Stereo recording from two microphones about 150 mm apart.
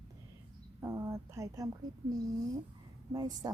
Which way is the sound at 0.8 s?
20° right (ahead or behind).